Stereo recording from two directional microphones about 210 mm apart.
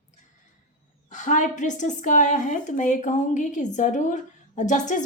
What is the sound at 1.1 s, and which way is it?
A woman's voice, 35° left (ahead or behind).